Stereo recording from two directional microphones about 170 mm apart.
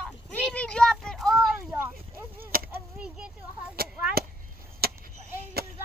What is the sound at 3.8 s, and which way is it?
Chop, 60° right (ahead or behind).